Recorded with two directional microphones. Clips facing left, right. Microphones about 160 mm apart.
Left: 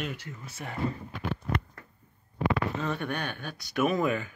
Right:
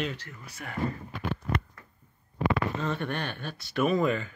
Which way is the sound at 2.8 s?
5° left (ahead or behind).